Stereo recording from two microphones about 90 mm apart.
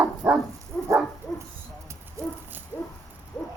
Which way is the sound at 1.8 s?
30° right (ahead or behind).